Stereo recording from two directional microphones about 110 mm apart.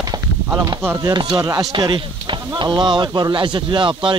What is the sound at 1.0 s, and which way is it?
Speech, 35° right (ahead or behind).